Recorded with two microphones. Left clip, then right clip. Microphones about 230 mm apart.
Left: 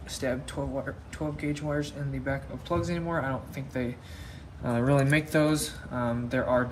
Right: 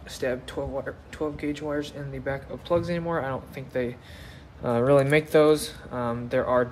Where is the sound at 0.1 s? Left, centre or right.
Right.